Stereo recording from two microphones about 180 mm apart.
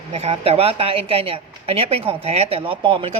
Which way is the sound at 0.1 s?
35° right (ahead or behind).